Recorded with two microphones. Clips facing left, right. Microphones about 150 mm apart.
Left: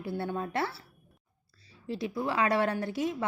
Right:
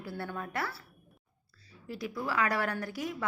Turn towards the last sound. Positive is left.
turn(degrees=25)  # may be behind; listen again after turning